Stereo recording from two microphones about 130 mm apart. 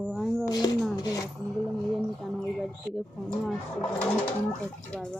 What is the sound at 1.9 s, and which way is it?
Speech, centre (ahead or behind).